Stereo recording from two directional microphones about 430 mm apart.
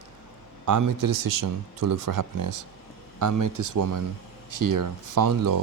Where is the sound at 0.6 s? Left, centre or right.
Right.